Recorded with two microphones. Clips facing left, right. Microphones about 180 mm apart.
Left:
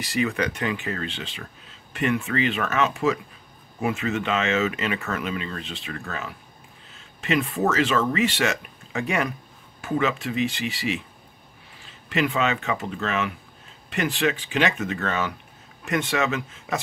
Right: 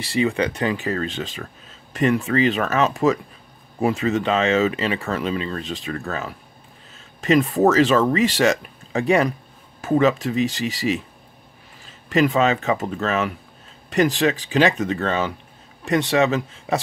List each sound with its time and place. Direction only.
0.0 s speech: 30° right (ahead or behind)